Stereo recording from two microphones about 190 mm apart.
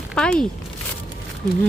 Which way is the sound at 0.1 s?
5° left (ahead or behind).